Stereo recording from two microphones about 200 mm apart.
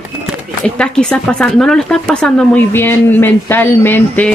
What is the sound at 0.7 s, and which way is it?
Speech, 5° left (ahead or behind).